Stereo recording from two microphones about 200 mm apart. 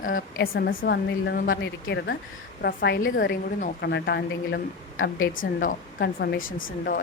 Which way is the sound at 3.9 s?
60° left (ahead or behind).